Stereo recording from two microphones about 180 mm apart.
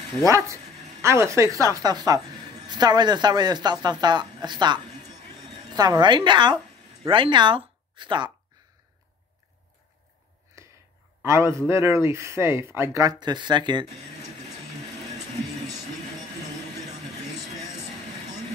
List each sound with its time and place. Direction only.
0.2 s a man's voice: 20° right (ahead or behind)
5.8 s speech: 25° right (ahead or behind)
11.2 s a man's voice: 15° right (ahead or behind)